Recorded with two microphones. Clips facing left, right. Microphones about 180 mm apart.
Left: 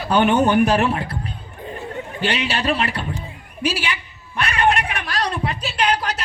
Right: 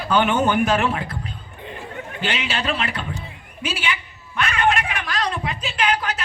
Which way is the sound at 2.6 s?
35° left (ahead or behind).